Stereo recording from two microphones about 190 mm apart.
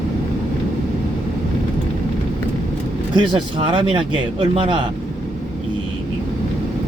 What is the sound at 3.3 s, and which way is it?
Speech, 25° right (ahead or behind).